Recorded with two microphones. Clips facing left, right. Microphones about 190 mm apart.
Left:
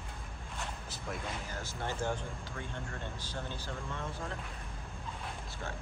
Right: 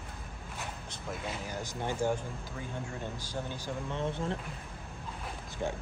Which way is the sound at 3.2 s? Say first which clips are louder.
Right 3 dB; 10° right (ahead or behind).